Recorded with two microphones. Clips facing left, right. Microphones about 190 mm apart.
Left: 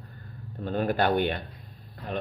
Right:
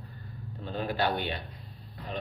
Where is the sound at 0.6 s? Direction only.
50° left (ahead or behind).